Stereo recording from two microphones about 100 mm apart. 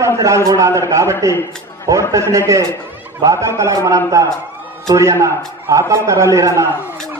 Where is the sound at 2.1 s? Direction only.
30° right (ahead or behind).